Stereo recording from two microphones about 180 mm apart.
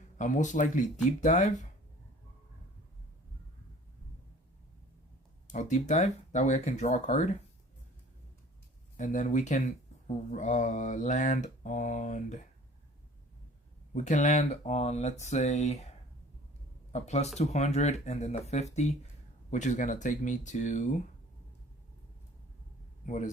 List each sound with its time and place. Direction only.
0.2 s mantra: 45° left (ahead or behind)
5.5 s speech: 40° left (ahead or behind)
9.0 s mantra: 45° left (ahead or behind)
13.9 s speech: 40° left (ahead or behind)
16.9 s speech: 40° left (ahead or behind)
19.5 s mantra: 40° left (ahead or behind)
23.0 s mantra: 40° left (ahead or behind)